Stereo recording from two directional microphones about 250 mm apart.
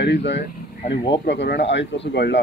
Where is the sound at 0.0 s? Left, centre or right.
Left.